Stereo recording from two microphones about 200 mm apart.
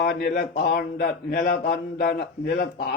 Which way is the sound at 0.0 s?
50° left (ahead or behind).